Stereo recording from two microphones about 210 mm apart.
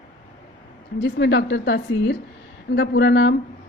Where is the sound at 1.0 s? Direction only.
55° left (ahead or behind).